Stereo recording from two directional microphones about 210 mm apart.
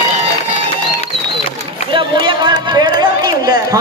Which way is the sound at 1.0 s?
30° left (ahead or behind).